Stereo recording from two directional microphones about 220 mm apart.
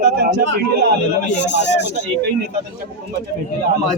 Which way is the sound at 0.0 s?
45° right (ahead or behind).